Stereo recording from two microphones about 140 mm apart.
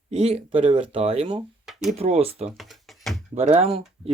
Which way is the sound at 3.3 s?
50° right (ahead or behind).